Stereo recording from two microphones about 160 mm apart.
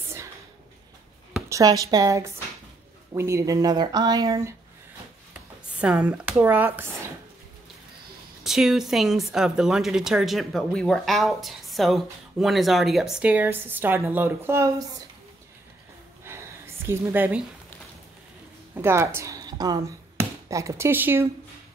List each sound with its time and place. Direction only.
1.5 s speech: 25° right (ahead or behind)
5.3 s speech: 5° right (ahead or behind)
8.5 s a woman's voice: centre (ahead or behind)
16.3 s a sound: 15° right (ahead or behind)
18.8 s speech: 15° right (ahead or behind)